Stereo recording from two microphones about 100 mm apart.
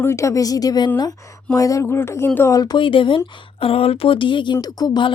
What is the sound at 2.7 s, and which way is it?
Speech, 60° left (ahead or behind).